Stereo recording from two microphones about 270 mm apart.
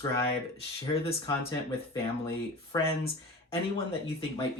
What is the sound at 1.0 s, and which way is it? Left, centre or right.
Speech, centre.